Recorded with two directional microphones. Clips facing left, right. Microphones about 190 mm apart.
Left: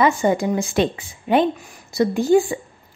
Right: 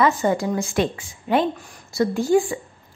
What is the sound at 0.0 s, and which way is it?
A woman's voice, 15° left (ahead or behind).